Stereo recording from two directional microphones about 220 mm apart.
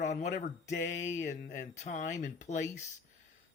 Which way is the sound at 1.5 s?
35° left (ahead or behind).